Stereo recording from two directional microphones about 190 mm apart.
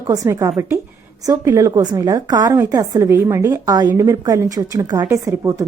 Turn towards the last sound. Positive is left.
turn(degrees=-15)  # may be behind; listen again after turning